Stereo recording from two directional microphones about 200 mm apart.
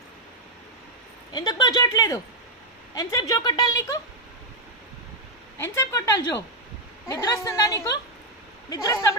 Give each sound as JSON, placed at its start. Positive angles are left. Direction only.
{"t": 1.3, "sound": "a woman's voice", "side_deg": 20}
{"t": 5.5, "sound": "a woman's voice", "side_deg": 15}